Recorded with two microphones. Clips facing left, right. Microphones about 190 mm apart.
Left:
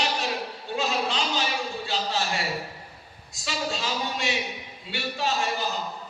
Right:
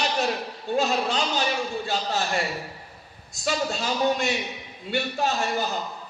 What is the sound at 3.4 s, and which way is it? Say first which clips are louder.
Speech: right 4 dB; 50° right (ahead or behind).